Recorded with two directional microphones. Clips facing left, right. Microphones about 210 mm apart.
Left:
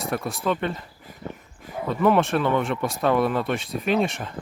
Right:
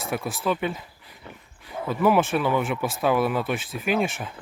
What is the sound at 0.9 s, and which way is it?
Dog, 45° left (ahead or behind).